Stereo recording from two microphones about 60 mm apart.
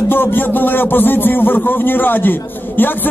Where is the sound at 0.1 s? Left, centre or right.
Left.